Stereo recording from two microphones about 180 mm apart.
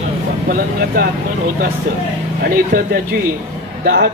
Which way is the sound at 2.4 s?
55° right (ahead or behind).